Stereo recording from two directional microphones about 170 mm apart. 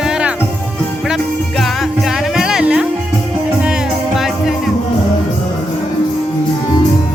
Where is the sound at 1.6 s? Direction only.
Centre (ahead or behind).